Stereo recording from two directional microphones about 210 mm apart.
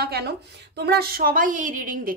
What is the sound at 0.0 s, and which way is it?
Speech, 50° right (ahead or behind).